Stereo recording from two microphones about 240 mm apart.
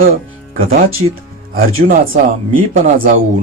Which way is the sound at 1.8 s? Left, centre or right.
Right.